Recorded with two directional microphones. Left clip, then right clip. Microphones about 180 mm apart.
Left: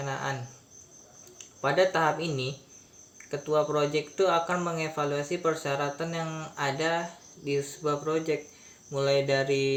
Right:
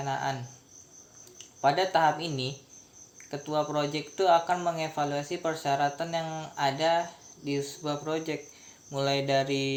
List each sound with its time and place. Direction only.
0.0 s speech: 20° right (ahead or behind)
1.6 s speech: 20° right (ahead or behind)